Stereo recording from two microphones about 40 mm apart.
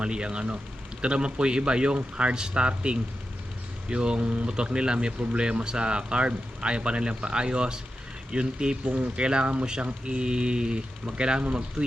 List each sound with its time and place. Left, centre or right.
0.0 s speech: right
8.8 s speech: right
9.1 s speech: right